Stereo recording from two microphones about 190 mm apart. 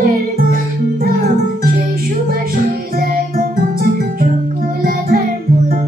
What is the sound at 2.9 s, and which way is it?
Music, 50° right (ahead or behind).